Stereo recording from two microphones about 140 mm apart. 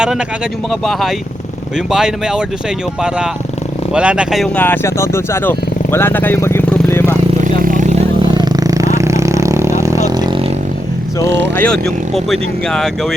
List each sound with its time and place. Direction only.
0.7 s speech: centre (ahead or behind)
3.9 s speech: 5° right (ahead or behind)
4.5 s speech: 15° left (ahead or behind)
7.6 s vehicle: 70° right (ahead or behind)
8.2 s a sound: 30° right (ahead or behind)
9.0 s vehicle: 20° right (ahead or behind)
11.5 s speech: 5° left (ahead or behind)